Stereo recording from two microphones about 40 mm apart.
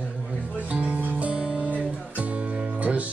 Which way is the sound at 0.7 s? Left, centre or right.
Right.